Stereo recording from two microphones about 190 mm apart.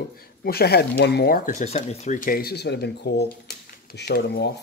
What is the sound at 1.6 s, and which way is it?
Speech, 35° left (ahead or behind).